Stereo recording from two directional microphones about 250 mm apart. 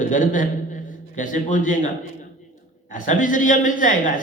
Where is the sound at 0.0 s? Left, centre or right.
Left.